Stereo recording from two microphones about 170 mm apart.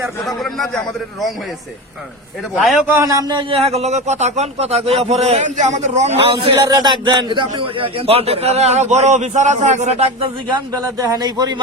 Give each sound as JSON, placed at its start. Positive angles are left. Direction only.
{"t": 0.3, "sound": "a man's voice", "side_deg": 0}
{"t": 2.8, "sound": "a man's voice", "side_deg": -15}
{"t": 11.0, "sound": "speech", "side_deg": -20}